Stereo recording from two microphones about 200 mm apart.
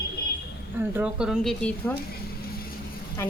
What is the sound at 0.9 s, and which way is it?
A woman's voice, 5° right (ahead or behind).